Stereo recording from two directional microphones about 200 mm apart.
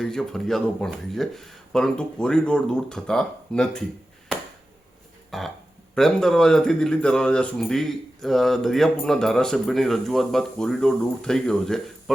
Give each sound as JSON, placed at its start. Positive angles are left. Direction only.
{"t": 0.0, "sound": "speech", "side_deg": 0}
{"t": 5.3, "sound": "speech", "side_deg": 0}